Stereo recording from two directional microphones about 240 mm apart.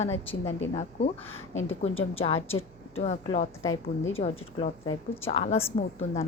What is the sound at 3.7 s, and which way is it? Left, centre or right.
Speech, left.